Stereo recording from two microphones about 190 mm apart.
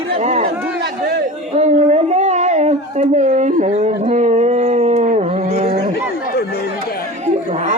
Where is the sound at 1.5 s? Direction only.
35° right (ahead or behind).